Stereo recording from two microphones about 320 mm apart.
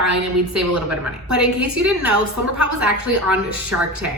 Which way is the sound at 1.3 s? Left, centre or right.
Right.